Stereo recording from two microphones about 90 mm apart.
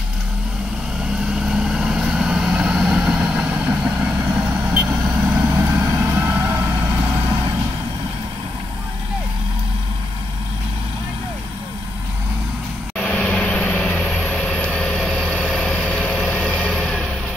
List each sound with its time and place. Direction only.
1.1 s vehicle: 10° right (ahead or behind)
12.9 s vehicle: 10° left (ahead or behind)